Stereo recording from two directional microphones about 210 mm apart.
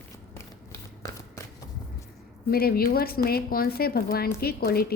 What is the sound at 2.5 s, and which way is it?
A woman's voice, 45° left (ahead or behind).